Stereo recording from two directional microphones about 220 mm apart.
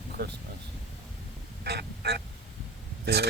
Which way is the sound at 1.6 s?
50° right (ahead or behind).